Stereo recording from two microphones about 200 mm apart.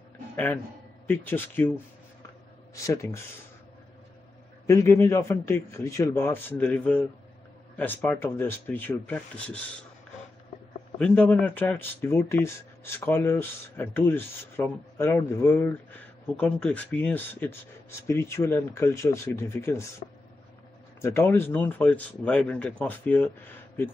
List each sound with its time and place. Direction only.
1.0 s speech: 10° left (ahead or behind)
2.7 s speech: 15° left (ahead or behind)
4.6 s speech: 15° left (ahead or behind)
11.0 s speech: 5° left (ahead or behind)
21.0 s speech: 15° left (ahead or behind)